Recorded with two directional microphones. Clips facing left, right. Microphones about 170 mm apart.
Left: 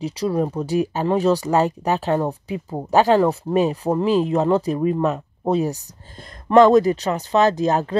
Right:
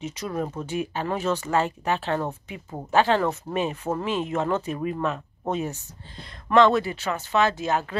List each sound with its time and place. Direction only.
0.0 s speech: 30° left (ahead or behind)
3.2 s speech: 25° left (ahead or behind)
3.5 s speech: 35° left (ahead or behind)